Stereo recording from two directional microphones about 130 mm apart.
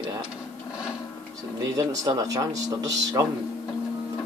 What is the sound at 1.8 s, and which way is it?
Speech, 30° right (ahead or behind).